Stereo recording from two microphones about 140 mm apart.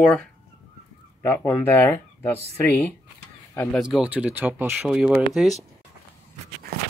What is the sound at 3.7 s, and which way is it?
Speech, 5° right (ahead or behind).